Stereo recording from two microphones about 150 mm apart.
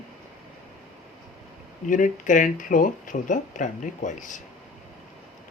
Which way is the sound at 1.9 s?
60° left (ahead or behind).